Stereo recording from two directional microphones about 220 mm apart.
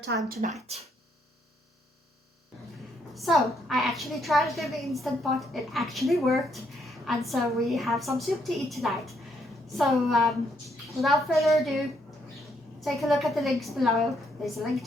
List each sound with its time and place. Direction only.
0.1 s speech: 50° right (ahead or behind)
0.7 s speech: 30° right (ahead or behind)
3.2 s a woman's voice: centre (ahead or behind)
12.8 s a woman's voice: centre (ahead or behind)